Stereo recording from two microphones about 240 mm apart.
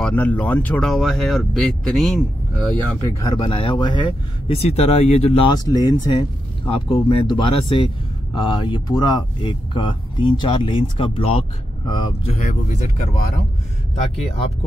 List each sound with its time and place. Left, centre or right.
0.0 s speech: centre
2.9 s speech: centre; by 12.9 s left
13.9 s speech: left